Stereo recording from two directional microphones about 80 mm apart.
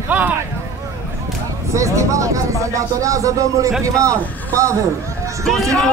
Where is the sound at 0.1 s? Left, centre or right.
Centre.